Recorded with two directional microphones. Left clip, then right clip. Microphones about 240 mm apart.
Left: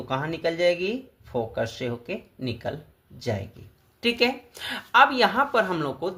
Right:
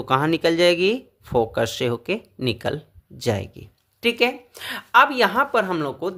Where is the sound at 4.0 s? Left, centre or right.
Right.